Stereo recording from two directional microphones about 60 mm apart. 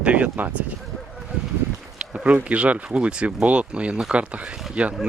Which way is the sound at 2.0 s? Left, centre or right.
Centre.